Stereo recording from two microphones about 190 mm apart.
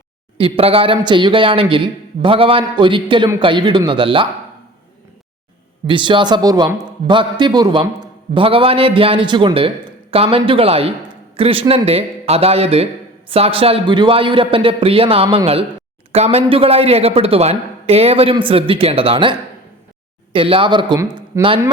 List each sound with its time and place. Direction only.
0.3 s a man's voice: 30° right (ahead or behind)
5.8 s a man's voice: 25° right (ahead or behind)